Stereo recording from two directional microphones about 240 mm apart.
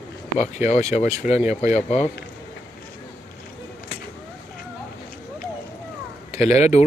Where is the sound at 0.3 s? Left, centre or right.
Left.